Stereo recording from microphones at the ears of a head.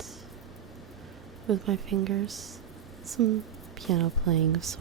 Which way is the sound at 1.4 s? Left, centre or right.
Right.